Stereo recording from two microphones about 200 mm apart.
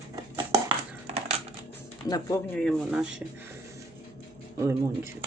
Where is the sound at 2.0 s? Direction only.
20° left (ahead or behind).